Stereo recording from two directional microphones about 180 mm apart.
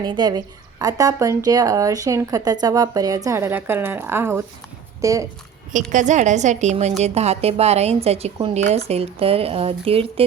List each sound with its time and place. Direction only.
0.0 s a woman's voice: 25° right (ahead or behind)
5.9 s a woman's voice: 40° right (ahead or behind)